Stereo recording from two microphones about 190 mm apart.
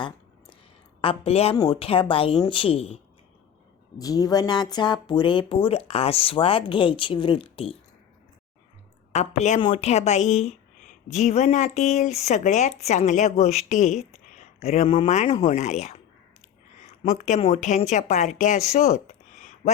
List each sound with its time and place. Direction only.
1.0 s speech: 30° left (ahead or behind)
3.9 s speech: 20° left (ahead or behind)
9.1 s speech: 35° left (ahead or behind)
17.0 s speech: 40° left (ahead or behind)
18.7 s a sound: 35° left (ahead or behind)